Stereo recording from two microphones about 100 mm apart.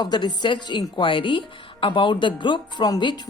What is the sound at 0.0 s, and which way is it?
A woman's voice, 45° left (ahead or behind).